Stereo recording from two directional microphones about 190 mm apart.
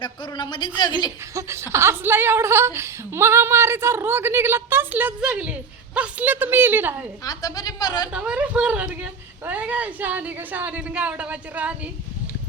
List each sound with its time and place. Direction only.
0.0 s speech: 25° left (ahead or behind)
1.3 s a woman's voice: 15° right (ahead or behind)
7.3 s speech: 20° left (ahead or behind)
8.1 s a woman's voice: 5° right (ahead or behind)